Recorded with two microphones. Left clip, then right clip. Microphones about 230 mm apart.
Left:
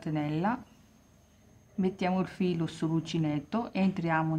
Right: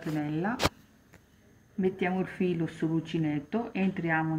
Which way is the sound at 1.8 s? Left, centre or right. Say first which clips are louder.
Right 1 dB; centre.